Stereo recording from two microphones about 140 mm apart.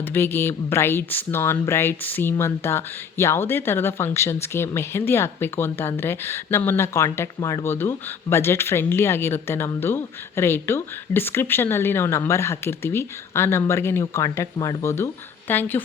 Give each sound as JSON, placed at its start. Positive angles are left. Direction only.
{"t": 0.0, "sound": "speech", "side_deg": 15}